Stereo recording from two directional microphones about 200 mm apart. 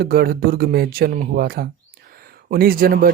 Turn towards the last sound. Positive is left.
turn(degrees=-45)  # may be behind; listen again after turning